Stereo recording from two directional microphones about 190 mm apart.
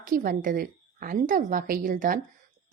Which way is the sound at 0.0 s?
45° right (ahead or behind).